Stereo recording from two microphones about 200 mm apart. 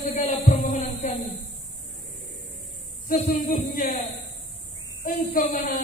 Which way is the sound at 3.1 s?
45° left (ahead or behind).